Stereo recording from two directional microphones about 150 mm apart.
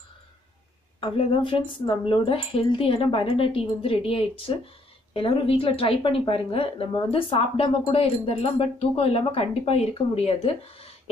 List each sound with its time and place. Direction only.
1.0 s a woman's voice: 35° left (ahead or behind)